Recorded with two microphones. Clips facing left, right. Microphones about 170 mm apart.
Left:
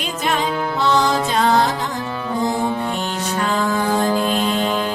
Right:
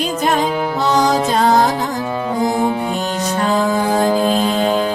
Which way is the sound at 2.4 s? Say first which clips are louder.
Right 3 dB; 15° right (ahead or behind).